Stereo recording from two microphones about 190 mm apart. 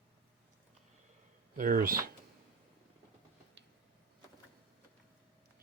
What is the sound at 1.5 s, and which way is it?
Speech, 45° right (ahead or behind).